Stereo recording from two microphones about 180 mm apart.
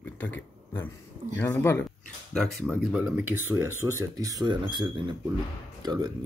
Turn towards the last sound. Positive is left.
turn(degrees=-25)  # may be behind; listen again after turning